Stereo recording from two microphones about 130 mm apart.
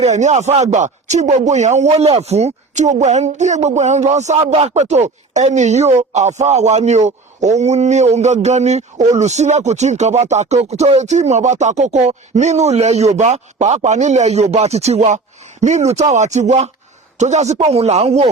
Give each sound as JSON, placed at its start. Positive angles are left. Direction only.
{"t": 0.0, "sound": "speech", "side_deg": -65}